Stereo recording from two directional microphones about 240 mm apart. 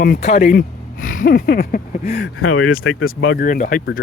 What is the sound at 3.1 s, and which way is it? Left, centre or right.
Speech, left.